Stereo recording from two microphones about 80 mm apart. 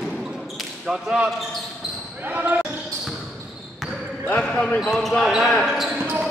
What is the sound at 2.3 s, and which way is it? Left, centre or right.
Speech, centre.